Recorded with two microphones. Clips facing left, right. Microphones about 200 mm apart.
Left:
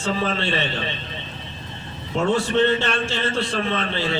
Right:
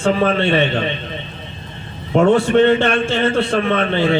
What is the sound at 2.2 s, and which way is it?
A man's voice, 55° right (ahead or behind).